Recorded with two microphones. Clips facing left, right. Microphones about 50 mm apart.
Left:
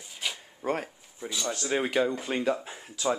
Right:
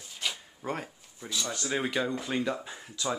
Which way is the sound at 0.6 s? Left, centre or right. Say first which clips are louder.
Left 5 dB; left.